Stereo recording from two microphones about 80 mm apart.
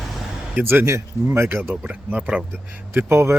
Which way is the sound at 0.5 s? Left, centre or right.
Right.